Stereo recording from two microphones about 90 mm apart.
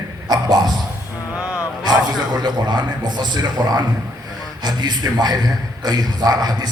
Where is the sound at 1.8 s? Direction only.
50° right (ahead or behind).